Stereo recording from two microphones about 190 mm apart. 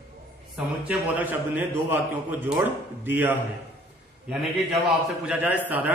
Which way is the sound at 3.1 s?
10° right (ahead or behind).